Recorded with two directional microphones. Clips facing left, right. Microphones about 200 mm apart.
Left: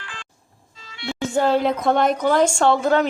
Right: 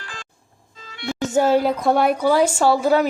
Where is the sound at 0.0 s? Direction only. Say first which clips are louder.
Right 2 dB; 40° right (ahead or behind).